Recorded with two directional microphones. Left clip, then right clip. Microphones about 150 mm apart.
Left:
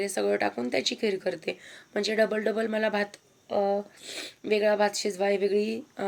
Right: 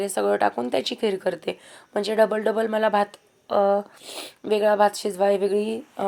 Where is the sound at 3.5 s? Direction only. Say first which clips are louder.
Right 6 dB; 35° right (ahead or behind).